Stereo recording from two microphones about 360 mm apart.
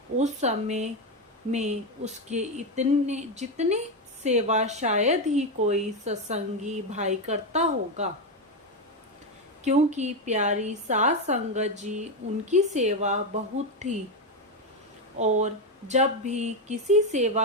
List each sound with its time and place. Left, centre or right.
0.2 s speech: centre
9.6 s speech: centre
15.9 s speech: centre